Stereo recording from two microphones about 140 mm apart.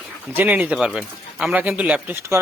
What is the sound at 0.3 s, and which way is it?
Speech, 10° right (ahead or behind).